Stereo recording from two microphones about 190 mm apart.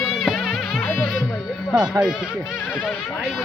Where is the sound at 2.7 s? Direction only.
5° right (ahead or behind).